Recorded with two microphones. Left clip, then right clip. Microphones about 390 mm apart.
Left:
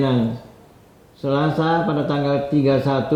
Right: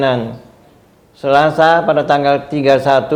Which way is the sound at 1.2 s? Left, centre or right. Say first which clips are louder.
Right 10 dB; right.